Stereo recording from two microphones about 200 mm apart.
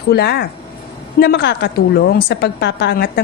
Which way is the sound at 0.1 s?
55° left (ahead or behind).